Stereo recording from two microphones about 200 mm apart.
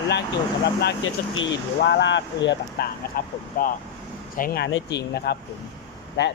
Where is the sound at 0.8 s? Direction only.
65° left (ahead or behind).